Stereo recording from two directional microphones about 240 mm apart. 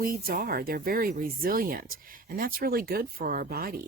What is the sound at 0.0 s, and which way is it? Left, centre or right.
Speech, right.